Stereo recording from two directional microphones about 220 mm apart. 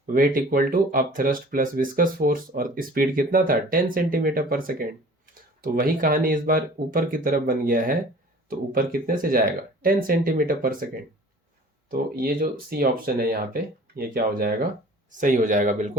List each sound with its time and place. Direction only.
0.0 s speech: 40° right (ahead or behind)
11.9 s speech: 40° right (ahead or behind)